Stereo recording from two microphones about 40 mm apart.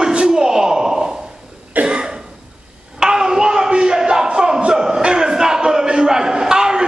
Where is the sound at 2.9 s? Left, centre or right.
Centre.